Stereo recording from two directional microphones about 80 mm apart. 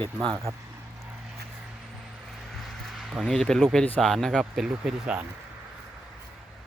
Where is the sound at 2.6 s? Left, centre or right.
Centre.